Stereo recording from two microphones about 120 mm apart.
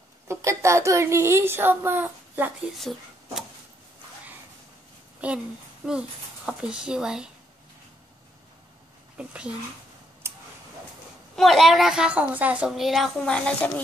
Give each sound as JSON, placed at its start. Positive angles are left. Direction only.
{"t": 0.3, "sound": "speech", "side_deg": -25}
{"t": 2.9, "sound": "a woman's voice", "side_deg": 0}
{"t": 5.2, "sound": "speech", "side_deg": -10}
{"t": 9.1, "sound": "speech", "side_deg": -10}
{"t": 10.2, "sound": "a sound", "side_deg": -20}
{"t": 11.3, "sound": "a woman's voice", "side_deg": 0}